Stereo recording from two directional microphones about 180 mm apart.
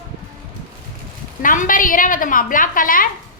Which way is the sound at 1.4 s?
50° left (ahead or behind).